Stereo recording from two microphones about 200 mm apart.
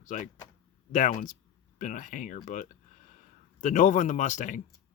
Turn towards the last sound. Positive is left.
turn(degrees=40)  # may be behind; listen again after turning